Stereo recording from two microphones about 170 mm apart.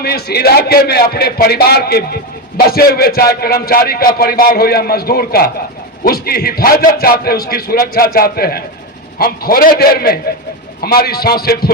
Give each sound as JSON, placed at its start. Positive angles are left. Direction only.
{"t": 0.0, "sound": "speech", "side_deg": 65}